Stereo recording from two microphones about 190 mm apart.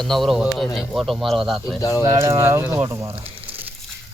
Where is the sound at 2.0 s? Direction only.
15° right (ahead or behind).